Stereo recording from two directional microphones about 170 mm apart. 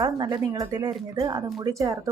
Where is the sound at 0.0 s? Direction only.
25° right (ahead or behind).